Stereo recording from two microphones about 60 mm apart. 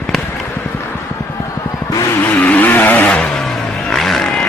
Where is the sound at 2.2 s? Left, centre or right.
Left.